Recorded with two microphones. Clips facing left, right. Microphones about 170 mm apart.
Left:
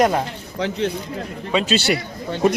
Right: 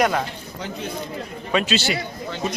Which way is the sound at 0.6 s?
80° left.